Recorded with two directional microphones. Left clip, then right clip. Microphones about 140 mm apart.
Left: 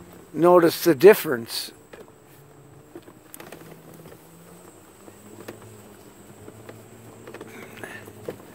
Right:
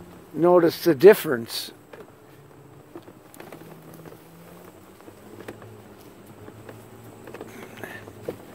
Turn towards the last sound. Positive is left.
turn(degrees=5)  # may be behind; listen again after turning